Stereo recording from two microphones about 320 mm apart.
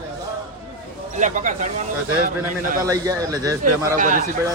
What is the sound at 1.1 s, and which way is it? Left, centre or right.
Speech, right.